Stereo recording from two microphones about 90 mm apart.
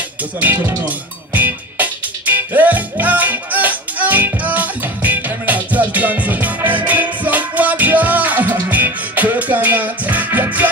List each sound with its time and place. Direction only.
0.4 s speech: 20° right (ahead or behind)
0.8 s music: 20° right (ahead or behind)